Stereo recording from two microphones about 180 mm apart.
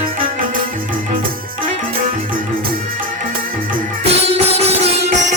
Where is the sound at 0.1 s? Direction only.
50° right (ahead or behind).